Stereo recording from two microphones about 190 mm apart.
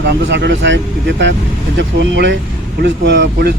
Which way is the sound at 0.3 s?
65° right (ahead or behind).